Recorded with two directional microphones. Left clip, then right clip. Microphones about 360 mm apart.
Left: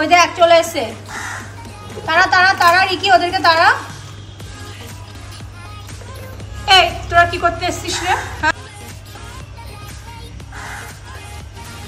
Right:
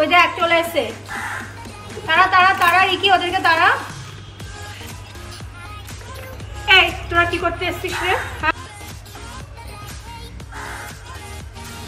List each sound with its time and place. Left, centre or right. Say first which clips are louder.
0.0 s a woman's voice: left 3 dB; centre
2.0 s a woman's voice: left 1 dB; centre
6.6 s a woman's voice: left 2 dB; centre